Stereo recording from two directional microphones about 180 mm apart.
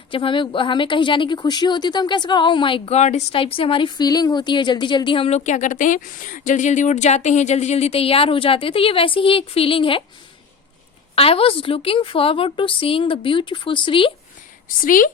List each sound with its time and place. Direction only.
0.1 s a woman's voice: 30° left (ahead or behind)
11.1 s a woman's voice: 30° left (ahead or behind)
14.8 s a woman's voice: 50° left (ahead or behind)